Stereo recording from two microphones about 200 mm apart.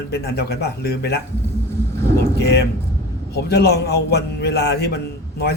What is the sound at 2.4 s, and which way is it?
A man's voice, 55° left (ahead or behind).